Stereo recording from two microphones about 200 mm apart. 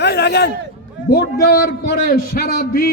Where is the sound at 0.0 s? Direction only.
55° left (ahead or behind).